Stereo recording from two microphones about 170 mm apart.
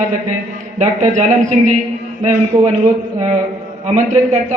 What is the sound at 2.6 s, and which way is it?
A man's voice, 40° right (ahead or behind).